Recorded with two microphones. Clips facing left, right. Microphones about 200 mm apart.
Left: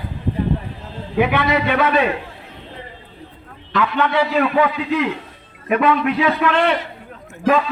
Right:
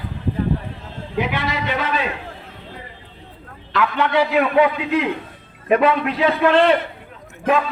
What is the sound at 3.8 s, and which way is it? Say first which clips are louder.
Speech: even; 10° right (ahead or behind).